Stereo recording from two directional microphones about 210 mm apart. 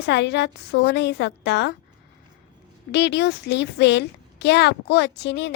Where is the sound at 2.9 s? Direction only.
55° left (ahead or behind).